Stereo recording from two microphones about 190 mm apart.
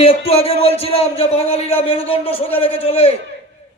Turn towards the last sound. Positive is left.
turn(degrees=30)  # may be behind; listen again after turning